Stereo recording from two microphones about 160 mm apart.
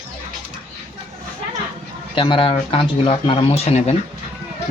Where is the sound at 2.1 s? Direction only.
30° left (ahead or behind).